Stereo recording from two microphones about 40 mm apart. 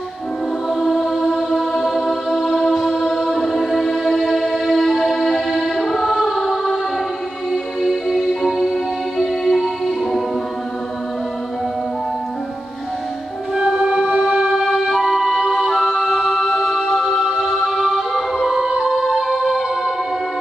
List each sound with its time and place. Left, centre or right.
0.7 s chant: centre
2.7 s music: centre
7.8 s music: centre
13.6 s music: centre
13.8 s music: right
14.6 s music: centre
17.2 s music: centre
17.5 s music: centre